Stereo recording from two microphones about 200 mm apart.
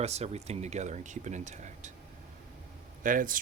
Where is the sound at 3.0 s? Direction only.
45° right (ahead or behind).